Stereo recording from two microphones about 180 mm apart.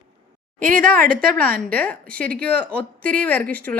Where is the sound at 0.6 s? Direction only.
50° right (ahead or behind).